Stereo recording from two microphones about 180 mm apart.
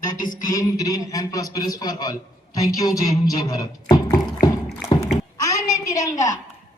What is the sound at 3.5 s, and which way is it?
Beatboxing, 20° left (ahead or behind).